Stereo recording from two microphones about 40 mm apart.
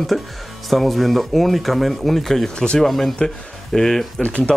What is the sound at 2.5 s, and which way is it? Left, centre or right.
Speech, left.